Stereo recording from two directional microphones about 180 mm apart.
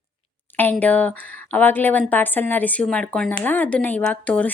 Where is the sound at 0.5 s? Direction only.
10° left (ahead or behind).